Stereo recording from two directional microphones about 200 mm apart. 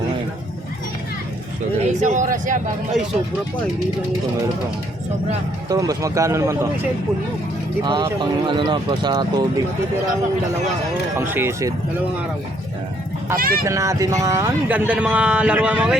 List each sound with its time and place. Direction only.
1.8 s a man's voice: 35° right (ahead or behind)
3.0 s speech: centre (ahead or behind)
5.6 s speech: 15° right (ahead or behind)
7.9 s speech: 25° right (ahead or behind)
11.2 s speech: 10° right (ahead or behind)
13.3 s speech: 45° right (ahead or behind)
13.7 s speech: 15° right (ahead or behind)